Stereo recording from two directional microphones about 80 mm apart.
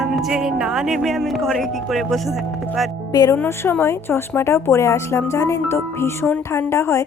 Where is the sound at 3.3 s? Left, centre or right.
Left.